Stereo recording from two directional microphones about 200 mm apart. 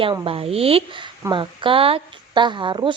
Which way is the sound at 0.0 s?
25° right (ahead or behind).